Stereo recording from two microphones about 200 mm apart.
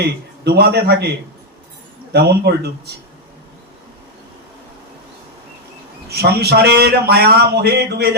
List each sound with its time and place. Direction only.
0.0 s a man's voice: 55° right (ahead or behind)
2.1 s speech: 55° right (ahead or behind)
6.1 s speech: 55° right (ahead or behind)